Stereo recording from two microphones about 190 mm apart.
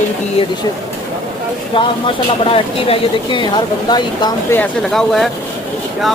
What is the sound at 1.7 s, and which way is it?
Speech, 25° left (ahead or behind).